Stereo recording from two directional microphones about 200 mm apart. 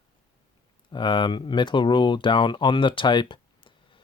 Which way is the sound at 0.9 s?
25° left (ahead or behind).